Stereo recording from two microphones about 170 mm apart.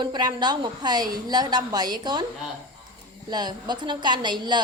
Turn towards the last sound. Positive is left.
turn(degrees=-25)  # may be behind; listen again after turning